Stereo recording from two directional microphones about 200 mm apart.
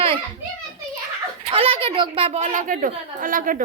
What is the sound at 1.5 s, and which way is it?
A woman's voice, 30° right (ahead or behind).